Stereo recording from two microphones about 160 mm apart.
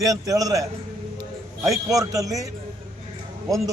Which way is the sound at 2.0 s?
20° right (ahead or behind).